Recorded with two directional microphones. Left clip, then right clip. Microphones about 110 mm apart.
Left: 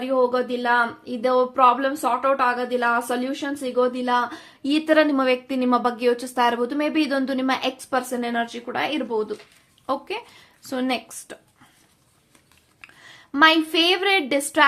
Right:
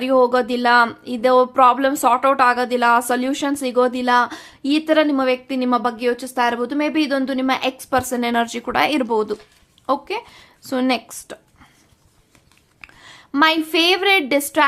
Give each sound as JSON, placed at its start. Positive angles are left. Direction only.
{"t": 0.0, "sound": "speech", "side_deg": -55}
{"t": 4.7, "sound": "a woman's voice", "side_deg": -10}
{"t": 7.8, "sound": "speech", "side_deg": -30}
{"t": 9.8, "sound": "speech", "side_deg": -30}
{"t": 12.8, "sound": "a woman's voice", "side_deg": -30}